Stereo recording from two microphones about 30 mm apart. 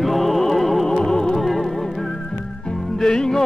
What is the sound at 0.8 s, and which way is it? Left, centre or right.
Music, left.